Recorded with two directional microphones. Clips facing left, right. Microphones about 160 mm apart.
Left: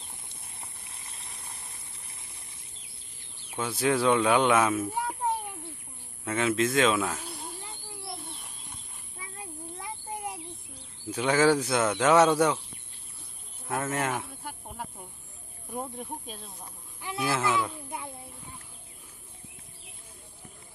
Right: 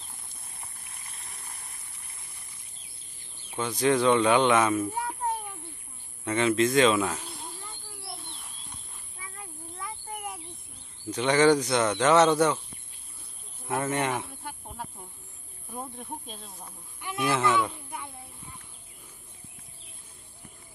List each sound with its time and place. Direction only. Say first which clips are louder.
0.6 s a sound: even; 30° left (ahead or behind)
2.8 s bird: left 1 dB; 75° left (ahead or behind)
3.5 s speech: right 2 dB; 5° left (ahead or behind)
6.2 s speech: right 3 dB; 5° left (ahead or behind)
7.3 s cricket: left 2 dB; centre (ahead or behind)
8.2 s bird: left 2 dB; centre (ahead or behind)
9.7 s a sound: right 1 dB; 25° left (ahead or behind)
11.1 s speech: right 2 dB; 5° left (ahead or behind)
13.7 s snake: right 2 dB; centre (ahead or behind)
15.7 s speech: left 2 dB; 10° left (ahead or behind)